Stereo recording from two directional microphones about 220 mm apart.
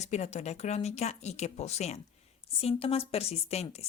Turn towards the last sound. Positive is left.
turn(degrees=30)  # may be behind; listen again after turning